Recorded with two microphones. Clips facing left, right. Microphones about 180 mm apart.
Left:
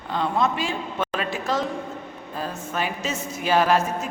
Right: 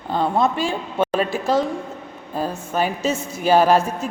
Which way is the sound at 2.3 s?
35° right (ahead or behind).